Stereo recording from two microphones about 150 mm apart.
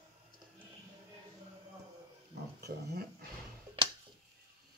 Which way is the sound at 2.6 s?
90° right.